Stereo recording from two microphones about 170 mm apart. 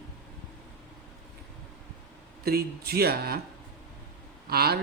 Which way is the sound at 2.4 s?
65° right (ahead or behind).